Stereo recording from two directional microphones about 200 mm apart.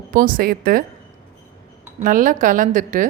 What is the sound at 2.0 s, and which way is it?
A woman's voice, 40° right (ahead or behind).